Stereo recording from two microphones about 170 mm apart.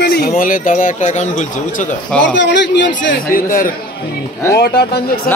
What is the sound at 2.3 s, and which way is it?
Speech, 90° left.